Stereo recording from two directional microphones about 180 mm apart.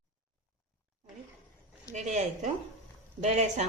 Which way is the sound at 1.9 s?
40° right (ahead or behind).